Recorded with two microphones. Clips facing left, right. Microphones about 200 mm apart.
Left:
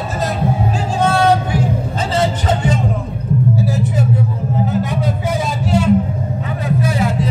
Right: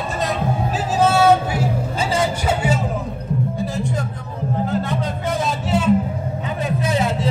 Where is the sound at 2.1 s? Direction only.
10° right (ahead or behind).